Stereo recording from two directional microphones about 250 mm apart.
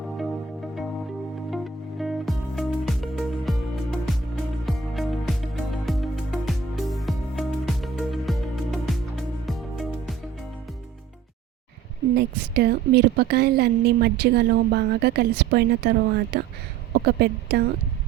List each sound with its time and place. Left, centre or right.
1.5 s music: centre
4.6 s music: centre
12.1 s a woman's voice: right